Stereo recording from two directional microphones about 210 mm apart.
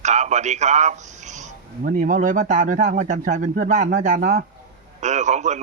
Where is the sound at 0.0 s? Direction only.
35° right (ahead or behind).